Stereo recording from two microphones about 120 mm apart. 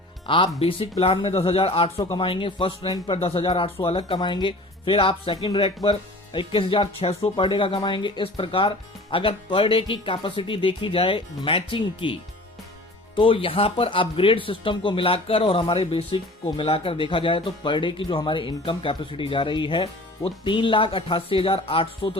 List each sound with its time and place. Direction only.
0.3 s speech: 45° left (ahead or behind)